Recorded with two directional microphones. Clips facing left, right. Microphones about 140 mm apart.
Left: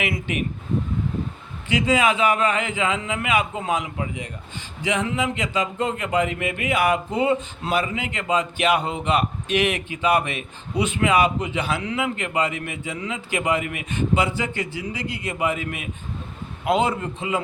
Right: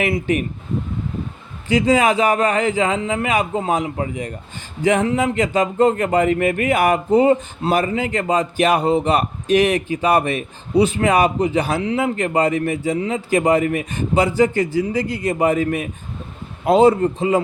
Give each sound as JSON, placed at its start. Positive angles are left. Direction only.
{"t": 0.3, "sound": "speech", "side_deg": -40}
{"t": 1.6, "sound": "speech", "side_deg": -40}